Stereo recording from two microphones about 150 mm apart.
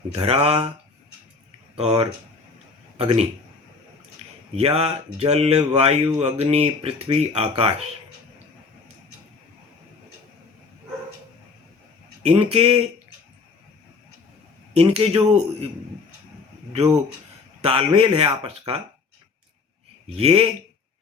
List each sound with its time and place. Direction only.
0.1 s speech: 40° right (ahead or behind)
1.7 s speech: 40° right (ahead or behind)
4.5 s speech: 45° right (ahead or behind)
12.2 s speech: 45° right (ahead or behind)
14.8 s speech: 40° right (ahead or behind)
17.6 s speech: 40° right (ahead or behind)
20.1 s speech: 40° right (ahead or behind)